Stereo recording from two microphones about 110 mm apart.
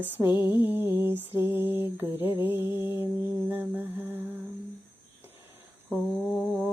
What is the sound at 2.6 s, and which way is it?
Mantra, 50° left (ahead or behind).